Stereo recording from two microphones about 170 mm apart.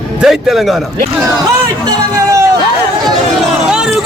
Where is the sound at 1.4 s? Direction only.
20° right (ahead or behind).